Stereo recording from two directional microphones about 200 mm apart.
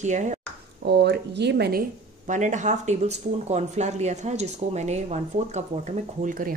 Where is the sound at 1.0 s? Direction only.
55° right (ahead or behind).